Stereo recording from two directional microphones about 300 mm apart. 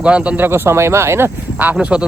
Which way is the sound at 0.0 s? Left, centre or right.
Centre.